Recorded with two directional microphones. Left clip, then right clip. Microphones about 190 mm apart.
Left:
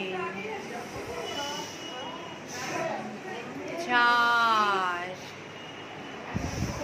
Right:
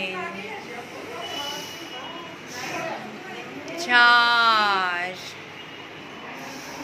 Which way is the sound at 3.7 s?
10° right (ahead or behind).